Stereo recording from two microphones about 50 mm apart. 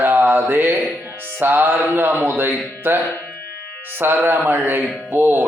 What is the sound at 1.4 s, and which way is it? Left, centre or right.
Music, right.